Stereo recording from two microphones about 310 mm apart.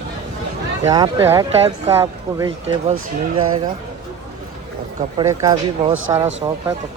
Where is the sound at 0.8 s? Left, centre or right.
Centre.